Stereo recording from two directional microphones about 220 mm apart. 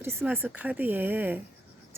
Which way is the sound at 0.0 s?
10° right (ahead or behind).